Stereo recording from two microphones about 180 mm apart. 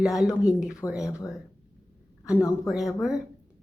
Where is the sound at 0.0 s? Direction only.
5° right (ahead or behind).